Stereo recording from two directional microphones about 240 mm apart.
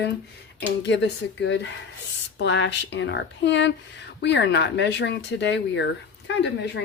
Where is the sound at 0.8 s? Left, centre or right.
Left.